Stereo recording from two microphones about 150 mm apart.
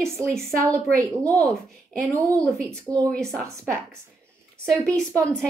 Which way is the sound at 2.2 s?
20° right (ahead or behind).